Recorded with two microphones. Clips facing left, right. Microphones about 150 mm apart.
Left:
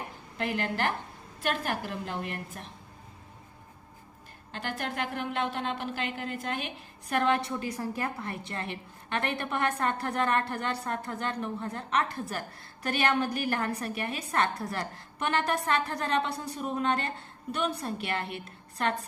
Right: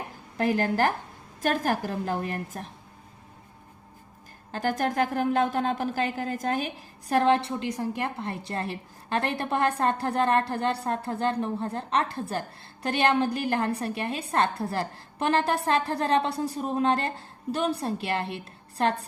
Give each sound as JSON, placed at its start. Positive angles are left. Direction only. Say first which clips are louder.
{"t": 0.3, "sound": "a woman's voice", "louder": "right 7 dB", "side_deg": -40}
{"t": 4.5, "sound": "a woman's voice", "louder": "right 8 dB", "side_deg": -40}